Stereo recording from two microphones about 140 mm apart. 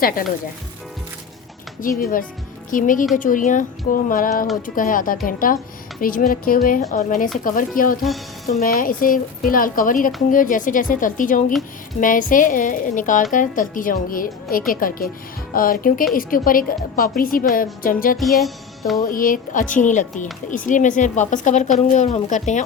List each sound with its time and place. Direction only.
1.8 s a woman's voice: 80° left
7.8 s a woman's voice: 90° left
18.2 s music: centre (ahead or behind)
19.0 s a woman's voice: 80° left; by 22.6 s 60° left (ahead or behind)